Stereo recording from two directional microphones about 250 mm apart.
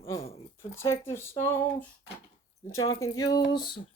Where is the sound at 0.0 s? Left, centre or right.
Left.